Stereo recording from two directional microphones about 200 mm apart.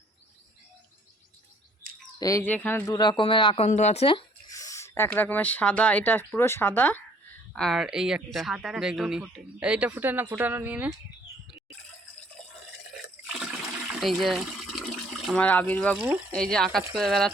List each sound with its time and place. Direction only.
2.1 s speech: 15° left (ahead or behind)
4.5 s speech: 15° left (ahead or behind); by 10.9 s 10° right (ahead or behind)
13.0 s water: centre (ahead or behind)
16.3 s speech: 5° left (ahead or behind)